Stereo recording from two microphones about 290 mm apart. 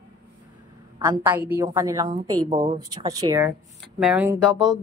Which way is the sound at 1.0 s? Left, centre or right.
Centre.